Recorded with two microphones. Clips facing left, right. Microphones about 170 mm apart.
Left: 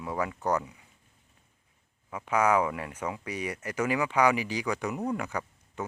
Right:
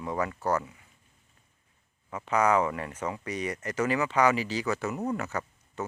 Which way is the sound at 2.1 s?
10° left (ahead or behind).